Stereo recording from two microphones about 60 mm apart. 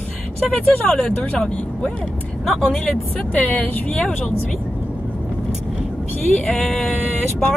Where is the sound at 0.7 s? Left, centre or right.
Centre.